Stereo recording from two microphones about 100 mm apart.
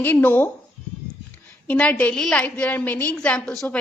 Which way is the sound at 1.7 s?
15° left (ahead or behind).